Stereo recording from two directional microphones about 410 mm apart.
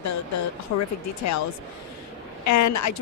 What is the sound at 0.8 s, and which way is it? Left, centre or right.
Speech, left.